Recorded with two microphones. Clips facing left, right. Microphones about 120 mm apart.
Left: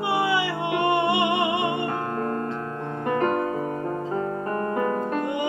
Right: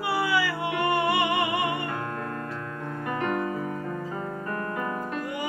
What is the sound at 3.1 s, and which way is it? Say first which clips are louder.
Music: left 5 dB; 40° left (ahead or behind).